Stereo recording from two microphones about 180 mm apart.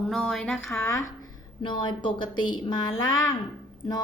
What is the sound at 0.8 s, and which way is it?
A woman's voice, 15° left (ahead or behind).